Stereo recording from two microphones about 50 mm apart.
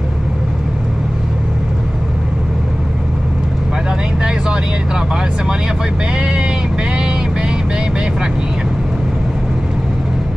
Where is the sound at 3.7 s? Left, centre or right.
Centre.